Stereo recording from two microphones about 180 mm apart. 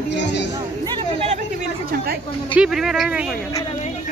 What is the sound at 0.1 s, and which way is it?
Speech, 75° left (ahead or behind).